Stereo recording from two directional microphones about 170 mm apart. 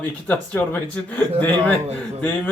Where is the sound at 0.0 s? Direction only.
10° left (ahead or behind).